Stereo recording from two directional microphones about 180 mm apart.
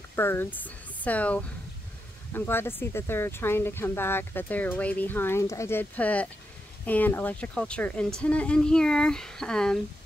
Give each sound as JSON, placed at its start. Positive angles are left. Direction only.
{"t": 0.1, "sound": "speech", "side_deg": 10}